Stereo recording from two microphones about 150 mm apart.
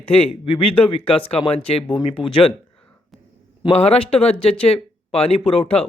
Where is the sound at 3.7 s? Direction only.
45° left (ahead or behind).